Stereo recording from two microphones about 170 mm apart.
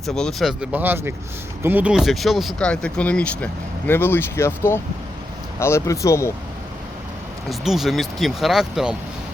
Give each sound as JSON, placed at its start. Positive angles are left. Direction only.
{"t": 0.0, "sound": "speech", "side_deg": 0}
{"t": 7.6, "sound": "speech", "side_deg": 0}